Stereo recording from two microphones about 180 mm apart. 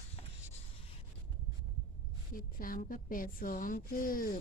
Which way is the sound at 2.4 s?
50° left (ahead or behind).